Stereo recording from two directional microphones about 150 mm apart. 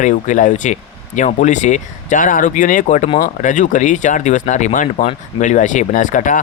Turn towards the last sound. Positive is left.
turn(degrees=60)  # may be behind; listen again after turning